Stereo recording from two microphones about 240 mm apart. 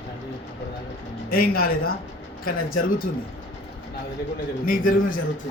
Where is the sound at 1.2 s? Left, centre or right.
Left.